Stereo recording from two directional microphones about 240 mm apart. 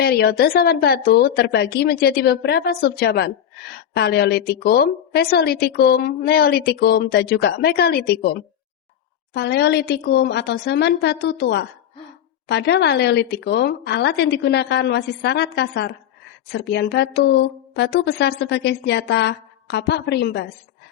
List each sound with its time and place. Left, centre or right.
0.0 s a woman's voice: left